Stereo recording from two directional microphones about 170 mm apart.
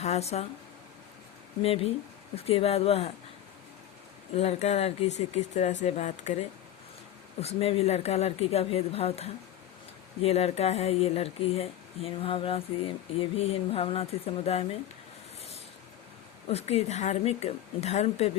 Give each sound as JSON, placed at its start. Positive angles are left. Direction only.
{"t": 0.0, "sound": "speech", "side_deg": 40}
{"t": 1.6, "sound": "speech", "side_deg": 35}
{"t": 4.4, "sound": "speech", "side_deg": 40}
{"t": 7.4, "sound": "speech", "side_deg": 35}
{"t": 16.5, "sound": "speech", "side_deg": 40}